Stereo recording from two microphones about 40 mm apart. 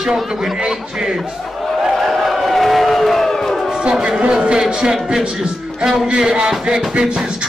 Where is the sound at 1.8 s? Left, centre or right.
Centre.